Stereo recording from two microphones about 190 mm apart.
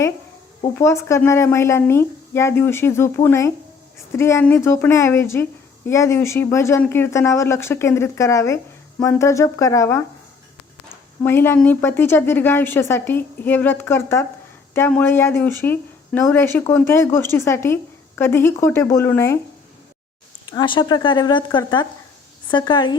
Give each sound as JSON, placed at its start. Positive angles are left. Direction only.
{"t": 0.6, "sound": "a woman's voice", "side_deg": 15}
{"t": 11.2, "sound": "a woman's voice", "side_deg": 10}
{"t": 20.5, "sound": "speech", "side_deg": 25}